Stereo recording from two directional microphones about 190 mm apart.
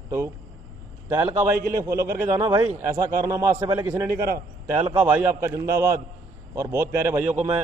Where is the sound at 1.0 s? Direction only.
10° right (ahead or behind).